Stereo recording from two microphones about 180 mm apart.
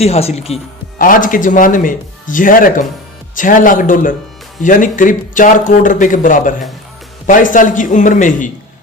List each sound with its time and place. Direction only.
0.0 s speech: 35° left (ahead or behind)
0.9 s speech: 50° left (ahead or behind)